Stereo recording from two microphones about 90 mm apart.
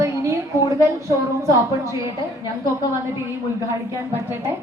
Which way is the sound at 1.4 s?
35° right (ahead or behind).